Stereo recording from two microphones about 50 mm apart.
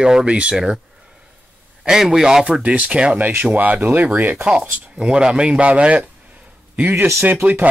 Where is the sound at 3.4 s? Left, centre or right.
Right.